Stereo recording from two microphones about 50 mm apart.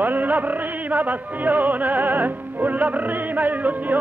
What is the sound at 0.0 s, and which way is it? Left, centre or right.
Music, right.